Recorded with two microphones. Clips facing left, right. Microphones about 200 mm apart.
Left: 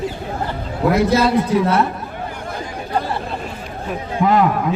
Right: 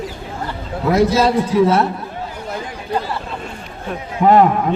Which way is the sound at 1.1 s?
60° left (ahead or behind).